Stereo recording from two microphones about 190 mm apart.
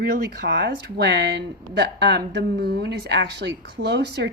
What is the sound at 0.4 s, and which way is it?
Speech, 65° right (ahead or behind).